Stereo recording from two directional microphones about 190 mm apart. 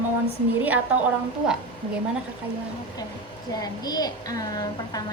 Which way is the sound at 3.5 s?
20° left (ahead or behind).